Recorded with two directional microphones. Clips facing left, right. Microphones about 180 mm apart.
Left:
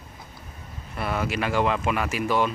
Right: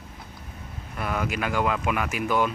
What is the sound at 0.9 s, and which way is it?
Speech, 5° left (ahead or behind).